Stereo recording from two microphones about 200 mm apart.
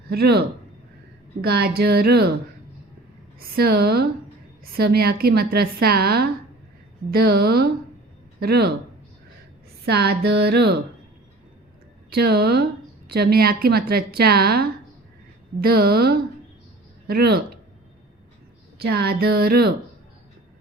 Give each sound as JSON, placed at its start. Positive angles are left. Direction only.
{"t": 0.1, "sound": "a woman's voice", "side_deg": -50}
{"t": 3.4, "sound": "a woman's voice", "side_deg": -50}
{"t": 9.8, "sound": "a woman's voice", "side_deg": -55}
{"t": 12.1, "sound": "a woman's voice", "side_deg": -50}
{"t": 18.8, "sound": "a woman's voice", "side_deg": -50}